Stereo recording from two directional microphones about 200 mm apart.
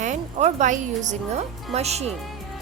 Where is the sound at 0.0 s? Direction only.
35° right (ahead or behind).